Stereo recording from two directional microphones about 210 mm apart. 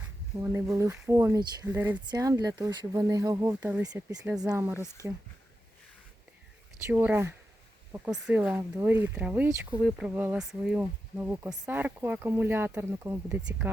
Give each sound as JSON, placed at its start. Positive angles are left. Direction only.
{"t": 0.0, "sound": "speech", "side_deg": -10}
{"t": 6.8, "sound": "speech", "side_deg": -10}